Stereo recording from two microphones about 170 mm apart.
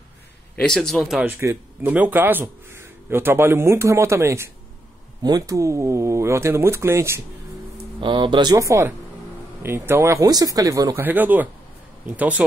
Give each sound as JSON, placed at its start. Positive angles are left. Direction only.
{"t": 0.6, "sound": "speech", "side_deg": 5}
{"t": 1.2, "sound": "speech", "side_deg": -15}
{"t": 7.7, "sound": "speech", "side_deg": -30}